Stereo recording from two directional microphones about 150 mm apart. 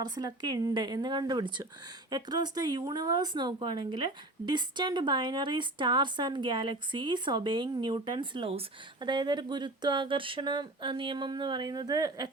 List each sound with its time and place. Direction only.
0.0 s speech: 25° right (ahead or behind)